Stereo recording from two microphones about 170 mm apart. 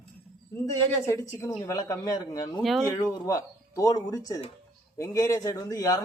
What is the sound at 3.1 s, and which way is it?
Speech, 20° left (ahead or behind).